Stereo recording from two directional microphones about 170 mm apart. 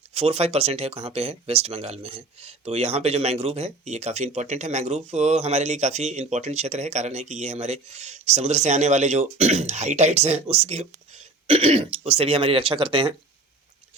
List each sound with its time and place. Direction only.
0.1 s speech: 35° right (ahead or behind)